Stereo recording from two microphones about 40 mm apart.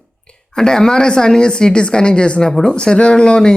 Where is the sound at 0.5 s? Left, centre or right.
Centre.